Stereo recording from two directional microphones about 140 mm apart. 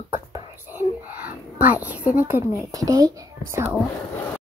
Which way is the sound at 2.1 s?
15° right (ahead or behind).